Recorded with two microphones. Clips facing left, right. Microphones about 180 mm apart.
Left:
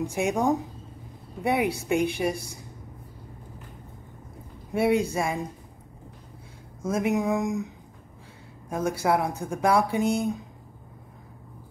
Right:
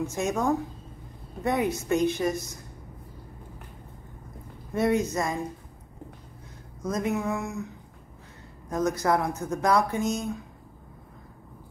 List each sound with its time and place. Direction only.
0.0 s speech: 15° left (ahead or behind)
4.7 s speech: 10° left (ahead or behind)
6.9 s speech: 15° left (ahead or behind)